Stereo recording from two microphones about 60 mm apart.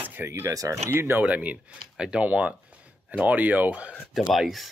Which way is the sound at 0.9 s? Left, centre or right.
Right.